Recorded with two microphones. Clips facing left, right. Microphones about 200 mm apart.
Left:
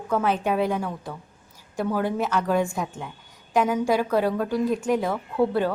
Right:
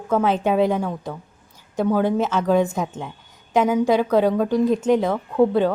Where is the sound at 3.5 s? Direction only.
20° right (ahead or behind).